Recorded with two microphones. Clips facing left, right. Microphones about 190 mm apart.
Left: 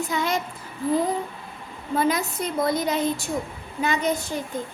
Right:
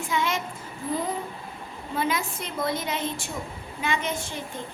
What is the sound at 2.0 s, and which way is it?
Child singing, 40° left (ahead or behind).